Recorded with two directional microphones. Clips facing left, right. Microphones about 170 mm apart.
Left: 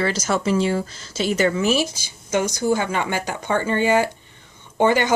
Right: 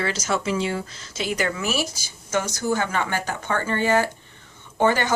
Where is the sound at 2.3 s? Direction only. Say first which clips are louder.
Left 4 dB; 15° left (ahead or behind).